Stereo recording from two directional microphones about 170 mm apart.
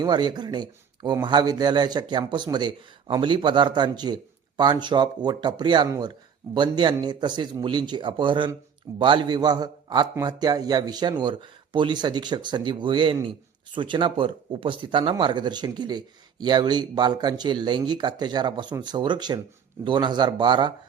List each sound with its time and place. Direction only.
0.0 s speech: 25° right (ahead or behind)